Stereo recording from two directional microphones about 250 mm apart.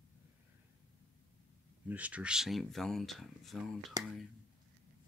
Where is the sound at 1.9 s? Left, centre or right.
Centre.